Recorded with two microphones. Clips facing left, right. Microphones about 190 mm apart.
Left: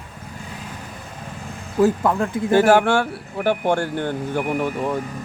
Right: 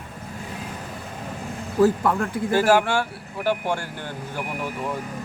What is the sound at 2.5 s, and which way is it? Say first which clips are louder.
Speech: left 4 dB; 60° left (ahead or behind).